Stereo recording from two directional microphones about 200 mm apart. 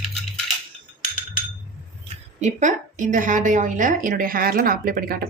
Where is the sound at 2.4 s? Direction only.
35° right (ahead or behind).